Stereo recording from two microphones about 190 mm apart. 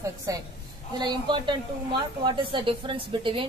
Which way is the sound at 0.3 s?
15° right (ahead or behind).